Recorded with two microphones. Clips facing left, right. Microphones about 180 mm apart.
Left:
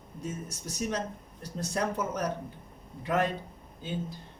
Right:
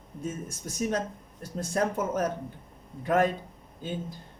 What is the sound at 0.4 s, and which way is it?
Speech, 50° right (ahead or behind).